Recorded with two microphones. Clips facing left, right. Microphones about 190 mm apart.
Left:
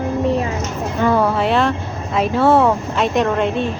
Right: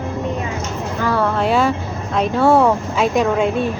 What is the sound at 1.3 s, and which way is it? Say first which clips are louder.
Vehicle: even; centre (ahead or behind).